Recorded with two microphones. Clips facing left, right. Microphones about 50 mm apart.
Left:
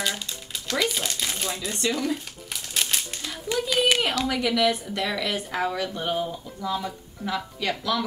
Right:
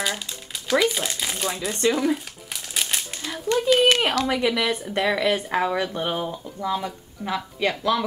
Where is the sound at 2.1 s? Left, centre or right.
Centre.